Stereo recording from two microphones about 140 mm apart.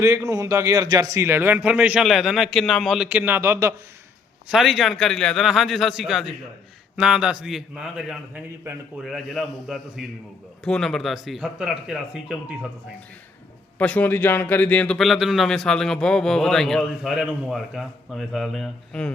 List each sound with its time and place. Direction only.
0.0 s a man's voice: 20° right (ahead or behind); by 3.1 s centre (ahead or behind)
3.1 s a man's voice: 15° right (ahead or behind)
4.4 s speech: centre (ahead or behind)
13.7 s speech: 10° left (ahead or behind)